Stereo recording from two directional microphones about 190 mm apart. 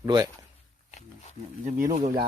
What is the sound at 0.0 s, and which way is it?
Speech, 20° right (ahead or behind).